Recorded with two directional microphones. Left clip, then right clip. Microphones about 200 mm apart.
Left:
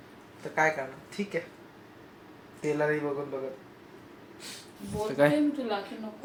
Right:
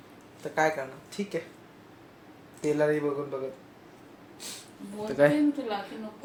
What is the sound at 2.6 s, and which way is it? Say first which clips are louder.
Speech: right 2 dB; 15° right (ahead or behind).